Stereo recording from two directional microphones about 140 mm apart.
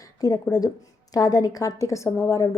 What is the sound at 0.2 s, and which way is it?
A woman's voice, 25° left (ahead or behind).